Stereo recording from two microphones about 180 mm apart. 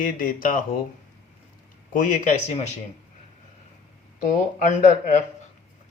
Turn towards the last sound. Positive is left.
turn(degrees=40)  # may be behind; listen again after turning